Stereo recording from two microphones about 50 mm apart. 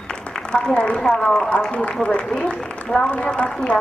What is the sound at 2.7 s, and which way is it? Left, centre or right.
A woman's voice, centre.